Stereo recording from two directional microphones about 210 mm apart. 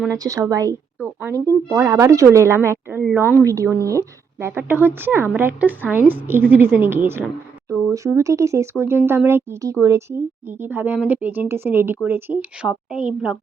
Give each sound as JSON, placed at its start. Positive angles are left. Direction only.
{"t": 0.2, "sound": "a woman's voice", "side_deg": -15}
{"t": 0.9, "sound": "a sound", "side_deg": -5}
{"t": 1.7, "sound": "a woman's voice", "side_deg": -10}
{"t": 3.3, "sound": "a woman's voice", "side_deg": -15}